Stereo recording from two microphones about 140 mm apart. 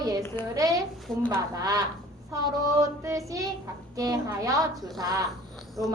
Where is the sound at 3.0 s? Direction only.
20° right (ahead or behind).